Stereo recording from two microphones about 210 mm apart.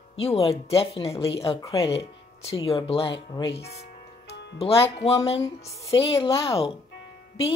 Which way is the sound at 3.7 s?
30° left (ahead or behind).